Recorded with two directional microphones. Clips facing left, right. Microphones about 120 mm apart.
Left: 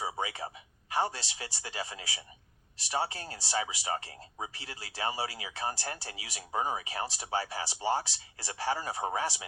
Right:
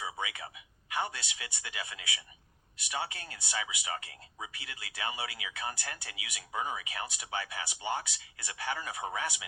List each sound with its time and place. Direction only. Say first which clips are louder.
0.0 s speech: left 4 dB; 35° left (ahead or behind)